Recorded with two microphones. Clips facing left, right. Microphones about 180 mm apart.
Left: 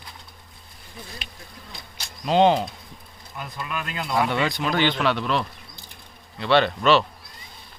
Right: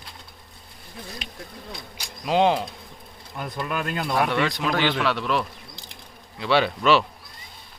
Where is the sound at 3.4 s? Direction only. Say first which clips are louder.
Right 4 dB; 50° right (ahead or behind).